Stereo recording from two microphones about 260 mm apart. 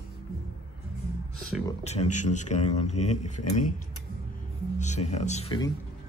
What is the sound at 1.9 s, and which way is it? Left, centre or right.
Speech, left.